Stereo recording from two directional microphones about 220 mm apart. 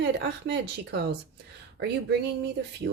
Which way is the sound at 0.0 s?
50° right (ahead or behind).